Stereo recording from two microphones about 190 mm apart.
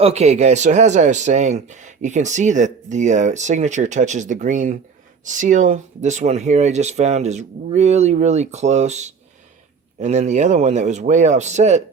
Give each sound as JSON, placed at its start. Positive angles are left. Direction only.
{"t": 0.0, "sound": "speech", "side_deg": -35}